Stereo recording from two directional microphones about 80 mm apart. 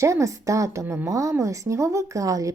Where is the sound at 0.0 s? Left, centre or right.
Right.